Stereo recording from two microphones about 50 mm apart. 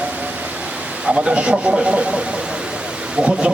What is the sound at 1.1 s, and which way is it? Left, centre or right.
Speech, right.